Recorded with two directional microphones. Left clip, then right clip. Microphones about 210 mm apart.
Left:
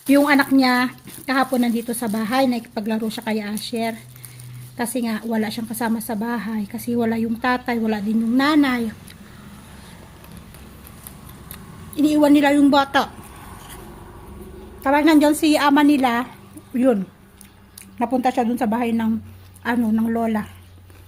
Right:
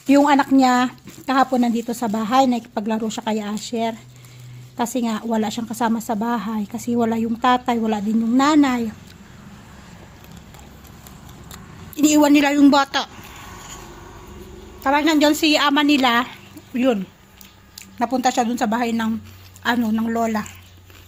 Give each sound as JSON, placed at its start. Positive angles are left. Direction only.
{"t": 0.1, "sound": "a woman's voice", "side_deg": -15}
{"t": 11.5, "sound": "speech", "side_deg": -15}
{"t": 14.8, "sound": "a woman's voice", "side_deg": 5}
{"t": 18.0, "sound": "speech", "side_deg": 0}